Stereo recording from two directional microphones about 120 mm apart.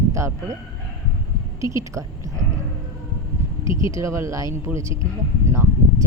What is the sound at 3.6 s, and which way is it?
Speech, 25° right (ahead or behind).